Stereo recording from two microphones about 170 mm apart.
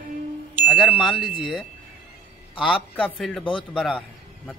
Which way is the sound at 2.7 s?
5° left (ahead or behind).